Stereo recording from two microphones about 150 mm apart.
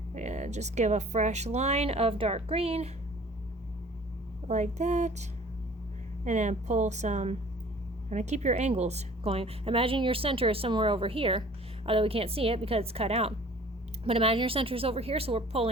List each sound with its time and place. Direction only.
0.1 s speech: 50° right (ahead or behind)
4.4 s speech: 50° right (ahead or behind)
6.2 s a woman's voice: 50° right (ahead or behind)